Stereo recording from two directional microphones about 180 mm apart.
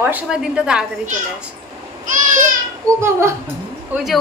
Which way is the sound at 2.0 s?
45° right (ahead or behind).